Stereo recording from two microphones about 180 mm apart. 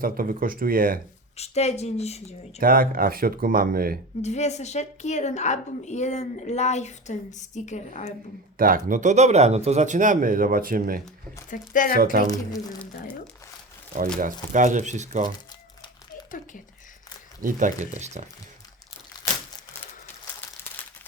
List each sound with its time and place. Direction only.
0.0 s speech: 55° right (ahead or behind)
1.4 s a woman's voice: 35° left (ahead or behind)
2.6 s speech: 50° right (ahead or behind)
4.2 s a woman's voice: 40° left (ahead or behind)
8.5 s speech: 50° right (ahead or behind)
11.5 s speech: 45° left (ahead or behind)
12.3 s speech: 20° left (ahead or behind)
14.2 s speech: 45° right (ahead or behind)
17.4 s speech: 45° right (ahead or behind)
19.8 s crumpling: 10° left (ahead or behind)